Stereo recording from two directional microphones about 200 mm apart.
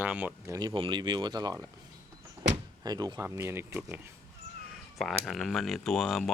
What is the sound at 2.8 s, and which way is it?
Speech, 20° right (ahead or behind).